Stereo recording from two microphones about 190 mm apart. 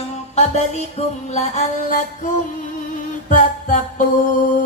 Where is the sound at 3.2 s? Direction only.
40° left (ahead or behind).